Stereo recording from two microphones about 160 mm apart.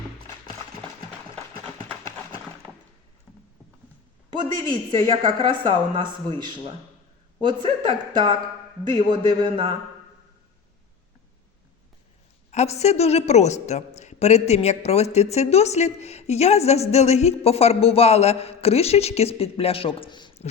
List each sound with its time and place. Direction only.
1.4 s a sound: 10° left (ahead or behind)
4.4 s speech: 30° right (ahead or behind)
12.5 s a woman's voice: 45° left (ahead or behind); by 20.4 s 30° left (ahead or behind)